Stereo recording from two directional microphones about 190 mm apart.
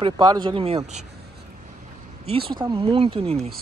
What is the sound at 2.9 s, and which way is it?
Speech, 30° right (ahead or behind).